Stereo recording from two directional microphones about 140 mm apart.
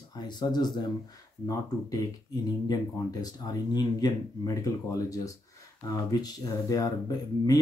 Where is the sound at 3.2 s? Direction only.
30° left (ahead or behind).